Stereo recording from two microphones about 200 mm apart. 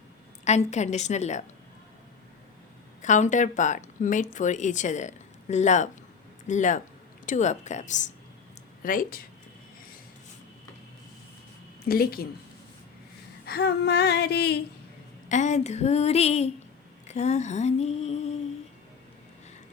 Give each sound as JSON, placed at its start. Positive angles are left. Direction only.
{"t": 0.4, "sound": "a woman's voice", "side_deg": 35}
{"t": 3.0, "sound": "a woman's voice", "side_deg": 40}
{"t": 11.9, "sound": "speech", "side_deg": 50}
{"t": 13.4, "sound": "a sound", "side_deg": 55}
{"t": 15.3, "sound": "a woman's voice", "side_deg": 35}
{"t": 17.1, "sound": "a sound", "side_deg": 35}